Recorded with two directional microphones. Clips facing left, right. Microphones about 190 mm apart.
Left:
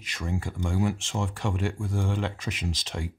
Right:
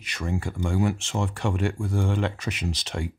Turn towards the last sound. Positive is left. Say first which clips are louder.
# right 3 dB
turn(degrees=-70)  # may be behind; listen again after turning